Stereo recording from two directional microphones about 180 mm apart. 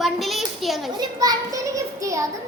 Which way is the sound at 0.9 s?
20° right (ahead or behind).